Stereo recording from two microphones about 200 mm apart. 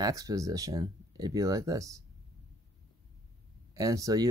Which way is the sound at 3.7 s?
15° right (ahead or behind).